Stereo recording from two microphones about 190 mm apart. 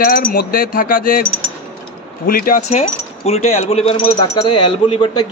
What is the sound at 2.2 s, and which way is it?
Speech, 50° left (ahead or behind).